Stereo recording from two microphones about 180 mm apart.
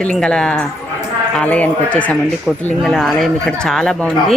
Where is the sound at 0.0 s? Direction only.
5° left (ahead or behind).